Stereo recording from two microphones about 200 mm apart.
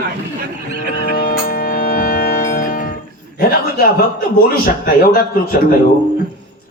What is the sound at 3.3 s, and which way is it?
A man's voice, 50° left (ahead or behind).